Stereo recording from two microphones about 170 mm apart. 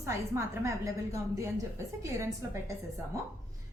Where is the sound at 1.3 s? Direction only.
15° right (ahead or behind).